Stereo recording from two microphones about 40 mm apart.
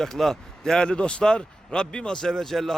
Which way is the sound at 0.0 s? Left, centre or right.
Centre.